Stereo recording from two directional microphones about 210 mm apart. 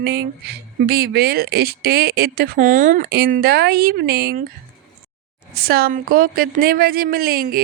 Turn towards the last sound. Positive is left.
turn(degrees=-45)  # may be behind; listen again after turning